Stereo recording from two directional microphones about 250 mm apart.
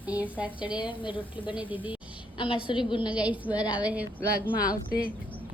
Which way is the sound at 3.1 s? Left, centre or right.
Centre.